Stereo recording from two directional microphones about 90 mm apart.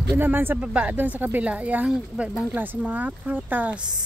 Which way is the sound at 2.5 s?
20° right (ahead or behind).